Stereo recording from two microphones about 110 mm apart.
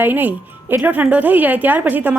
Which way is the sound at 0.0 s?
15° right (ahead or behind).